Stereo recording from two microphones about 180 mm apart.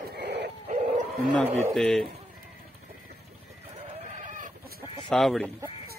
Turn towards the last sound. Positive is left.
turn(degrees=0)  # may be behind; listen again after turning